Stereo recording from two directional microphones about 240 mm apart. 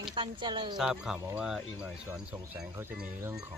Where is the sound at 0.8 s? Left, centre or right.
Centre.